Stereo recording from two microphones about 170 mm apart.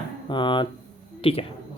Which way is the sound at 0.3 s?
25° left (ahead or behind).